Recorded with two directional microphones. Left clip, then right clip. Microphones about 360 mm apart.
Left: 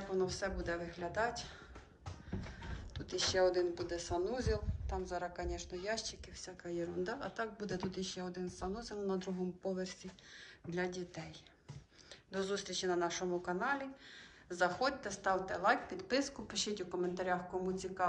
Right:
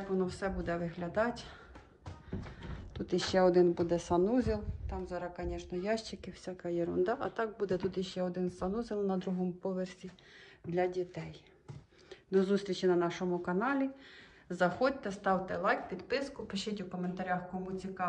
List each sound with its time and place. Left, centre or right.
0.2 s speech: centre
3.2 s speech: centre
10.7 s speech: centre